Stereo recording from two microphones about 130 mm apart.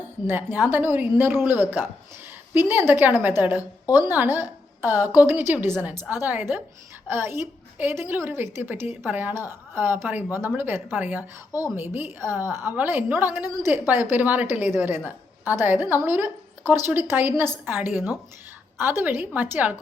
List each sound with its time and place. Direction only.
0.3 s a woman's voice: 15° right (ahead or behind)
3.8 s a woman's voice: 30° left (ahead or behind)
4.1 s a woman's voice: 15° right (ahead or behind)